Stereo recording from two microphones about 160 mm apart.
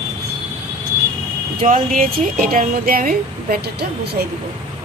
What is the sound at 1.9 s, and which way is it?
Speech, 60° right (ahead or behind).